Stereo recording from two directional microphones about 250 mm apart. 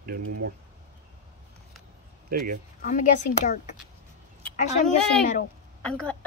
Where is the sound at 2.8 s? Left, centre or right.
Left.